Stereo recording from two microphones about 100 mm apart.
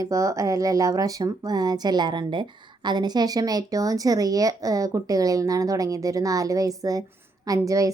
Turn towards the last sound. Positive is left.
turn(degrees=-35)  # may be behind; listen again after turning